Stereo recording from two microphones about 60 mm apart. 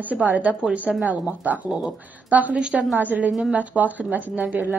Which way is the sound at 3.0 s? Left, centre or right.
Right.